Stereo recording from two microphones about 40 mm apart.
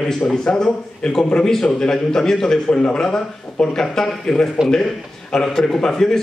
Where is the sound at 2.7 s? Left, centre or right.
Left.